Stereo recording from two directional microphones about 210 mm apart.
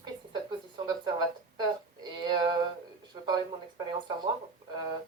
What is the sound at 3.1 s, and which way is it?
Speech, 20° right (ahead or behind).